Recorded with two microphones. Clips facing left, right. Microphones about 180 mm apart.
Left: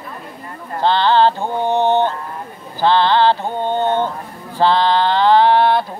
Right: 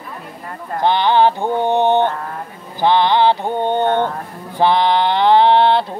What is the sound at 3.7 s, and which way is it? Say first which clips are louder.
Speech: right 1 dB; 60° right (ahead or behind).